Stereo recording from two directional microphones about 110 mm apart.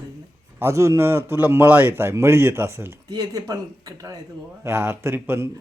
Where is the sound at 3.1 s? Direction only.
45° right (ahead or behind).